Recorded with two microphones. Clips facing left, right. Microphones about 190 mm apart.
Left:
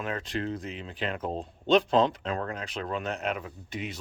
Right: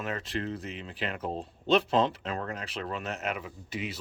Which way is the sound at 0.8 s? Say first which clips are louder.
Left 2 dB; 40° left (ahead or behind).